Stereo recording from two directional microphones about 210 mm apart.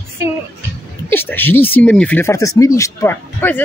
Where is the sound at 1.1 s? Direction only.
10° left (ahead or behind).